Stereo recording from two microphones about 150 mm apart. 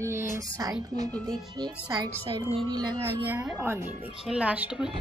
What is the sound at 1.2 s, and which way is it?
Speech, 30° right (ahead or behind).